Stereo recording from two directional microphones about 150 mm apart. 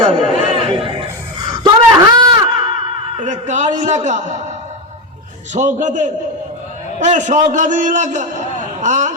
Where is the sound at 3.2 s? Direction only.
55° right (ahead or behind).